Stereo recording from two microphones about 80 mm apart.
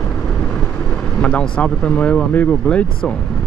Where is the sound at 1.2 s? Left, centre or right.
Centre.